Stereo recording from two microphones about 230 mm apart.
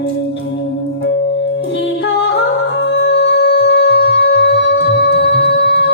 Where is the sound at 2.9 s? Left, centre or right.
Left.